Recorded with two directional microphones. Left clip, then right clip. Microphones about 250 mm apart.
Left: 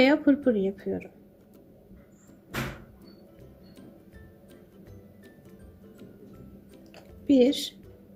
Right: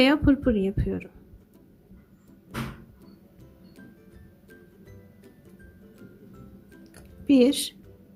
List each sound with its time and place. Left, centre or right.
0.0 s speech: centre
7.3 s a woman's voice: centre